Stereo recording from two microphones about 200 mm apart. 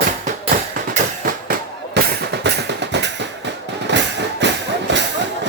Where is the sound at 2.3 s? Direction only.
55° right (ahead or behind).